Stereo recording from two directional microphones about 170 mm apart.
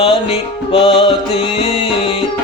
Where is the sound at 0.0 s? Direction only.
35° left (ahead or behind).